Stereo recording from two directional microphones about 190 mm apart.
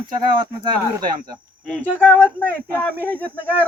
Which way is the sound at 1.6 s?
5° left (ahead or behind).